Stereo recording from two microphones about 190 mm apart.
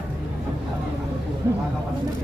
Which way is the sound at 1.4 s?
15° right (ahead or behind).